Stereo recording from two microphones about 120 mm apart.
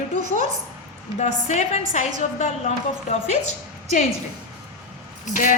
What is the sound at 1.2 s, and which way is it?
A woman's voice, 75° left (ahead or behind).